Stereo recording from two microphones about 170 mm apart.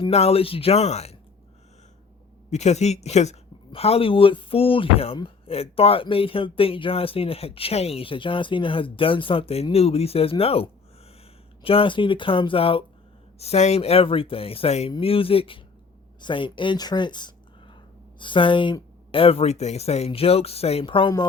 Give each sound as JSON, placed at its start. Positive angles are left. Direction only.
{"t": 0.0, "sound": "speech", "side_deg": 35}
{"t": 2.5, "sound": "speech", "side_deg": 40}